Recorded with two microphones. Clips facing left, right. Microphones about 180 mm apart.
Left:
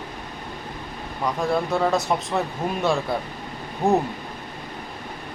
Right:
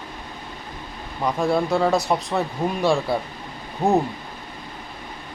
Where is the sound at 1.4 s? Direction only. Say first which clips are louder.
Right 2 dB; centre (ahead or behind).